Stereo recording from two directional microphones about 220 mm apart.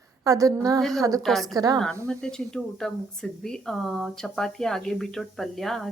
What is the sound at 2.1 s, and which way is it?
Speech, 5° left (ahead or behind).